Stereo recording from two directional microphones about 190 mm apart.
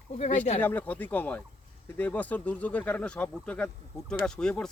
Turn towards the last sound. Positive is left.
turn(degrees=5)  # may be behind; listen again after turning